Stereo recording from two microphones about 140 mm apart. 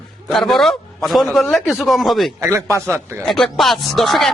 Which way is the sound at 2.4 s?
20° right (ahead or behind).